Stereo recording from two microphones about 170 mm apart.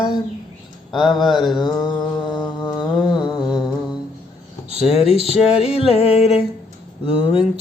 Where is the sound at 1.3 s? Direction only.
Centre (ahead or behind).